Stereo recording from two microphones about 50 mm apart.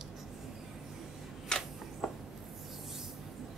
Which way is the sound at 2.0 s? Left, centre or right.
Centre.